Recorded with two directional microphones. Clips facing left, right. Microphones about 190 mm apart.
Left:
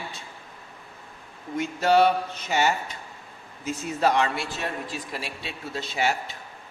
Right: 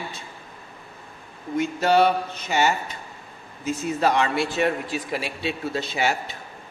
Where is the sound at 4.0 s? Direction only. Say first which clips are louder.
Right 1 dB; 75° right (ahead or behind).